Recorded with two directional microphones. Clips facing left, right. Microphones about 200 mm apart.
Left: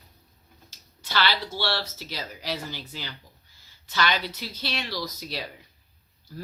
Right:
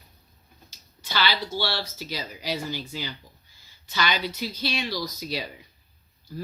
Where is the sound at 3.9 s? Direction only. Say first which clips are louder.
Even; centre (ahead or behind).